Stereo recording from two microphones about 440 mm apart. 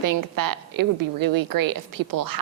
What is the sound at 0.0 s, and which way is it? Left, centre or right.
A woman's voice, right.